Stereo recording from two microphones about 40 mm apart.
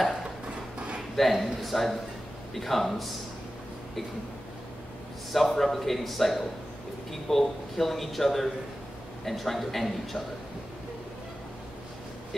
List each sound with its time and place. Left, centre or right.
1.1 s a man's voice: centre
5.5 s a man's voice: centre